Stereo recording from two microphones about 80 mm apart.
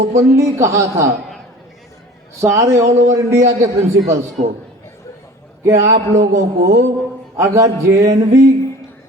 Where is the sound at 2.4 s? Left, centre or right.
Right.